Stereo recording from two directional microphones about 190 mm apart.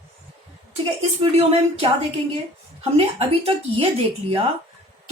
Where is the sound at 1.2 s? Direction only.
30° right (ahead or behind).